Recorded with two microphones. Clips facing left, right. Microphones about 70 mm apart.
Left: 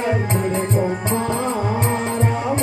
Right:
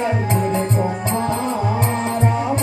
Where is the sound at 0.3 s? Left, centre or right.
Left.